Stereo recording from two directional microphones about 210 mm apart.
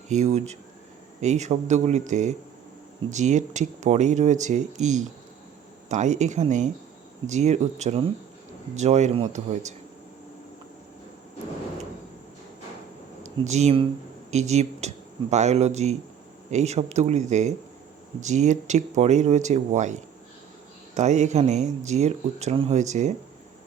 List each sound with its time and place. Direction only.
0.1 s speech: 35° right (ahead or behind)
13.2 s speech: 35° right (ahead or behind)